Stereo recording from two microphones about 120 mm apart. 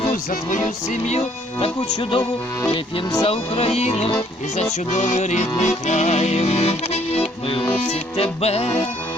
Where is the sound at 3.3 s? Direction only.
55° left (ahead or behind).